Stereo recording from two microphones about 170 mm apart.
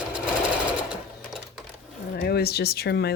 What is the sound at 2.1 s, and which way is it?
Speech, 65° left (ahead or behind).